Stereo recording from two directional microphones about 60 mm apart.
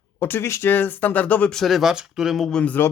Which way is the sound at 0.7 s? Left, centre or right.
Left.